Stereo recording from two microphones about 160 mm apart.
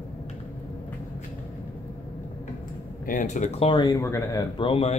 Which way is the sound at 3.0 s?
55° left (ahead or behind).